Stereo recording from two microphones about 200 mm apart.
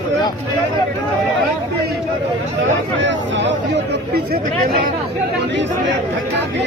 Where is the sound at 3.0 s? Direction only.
65° right (ahead or behind).